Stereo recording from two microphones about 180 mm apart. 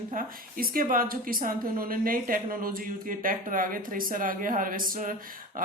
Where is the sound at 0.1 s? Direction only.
50° right (ahead or behind).